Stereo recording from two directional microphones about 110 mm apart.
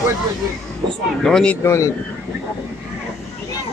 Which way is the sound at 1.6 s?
25° left (ahead or behind).